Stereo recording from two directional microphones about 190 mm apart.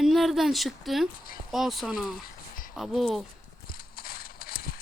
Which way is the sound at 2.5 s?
45° left (ahead or behind).